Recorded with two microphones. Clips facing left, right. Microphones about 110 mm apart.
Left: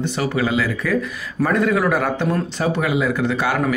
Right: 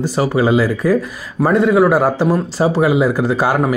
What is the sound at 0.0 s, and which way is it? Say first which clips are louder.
Speech: right 6 dB; 35° right (ahead or behind).